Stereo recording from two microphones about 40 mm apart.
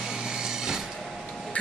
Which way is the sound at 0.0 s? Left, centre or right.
Centre.